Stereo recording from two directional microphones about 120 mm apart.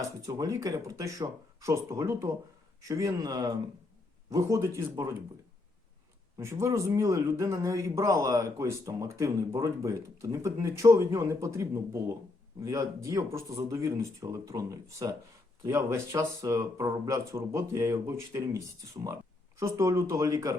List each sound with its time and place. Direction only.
0.3 s a man's voice: 30° right (ahead or behind)
6.4 s a man's voice: 25° right (ahead or behind)